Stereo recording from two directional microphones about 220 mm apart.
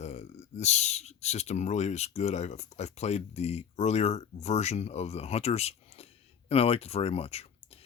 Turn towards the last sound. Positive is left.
turn(degrees=25)  # may be behind; listen again after turning